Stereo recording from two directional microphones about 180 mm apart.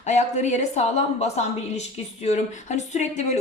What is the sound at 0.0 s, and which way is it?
Speech, 40° left (ahead or behind).